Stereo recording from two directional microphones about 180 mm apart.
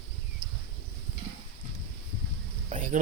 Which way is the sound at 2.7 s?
45° right (ahead or behind).